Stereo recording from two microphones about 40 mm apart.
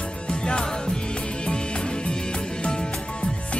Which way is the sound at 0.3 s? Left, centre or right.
Left.